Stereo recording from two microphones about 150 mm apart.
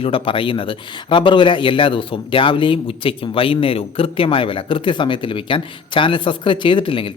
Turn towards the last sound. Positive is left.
turn(degrees=35)  # may be behind; listen again after turning